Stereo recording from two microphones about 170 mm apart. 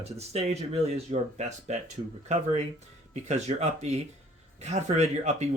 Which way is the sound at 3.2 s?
40° right (ahead or behind).